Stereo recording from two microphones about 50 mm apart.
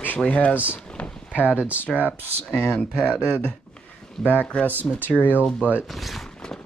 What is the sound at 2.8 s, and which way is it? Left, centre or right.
Speech, centre.